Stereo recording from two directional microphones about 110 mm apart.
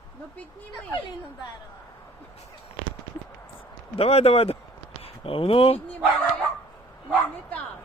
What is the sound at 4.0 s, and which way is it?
Speech, 70° left (ahead or behind).